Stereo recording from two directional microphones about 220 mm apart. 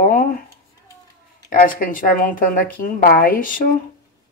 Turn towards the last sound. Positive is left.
turn(degrees=40)  # may be behind; listen again after turning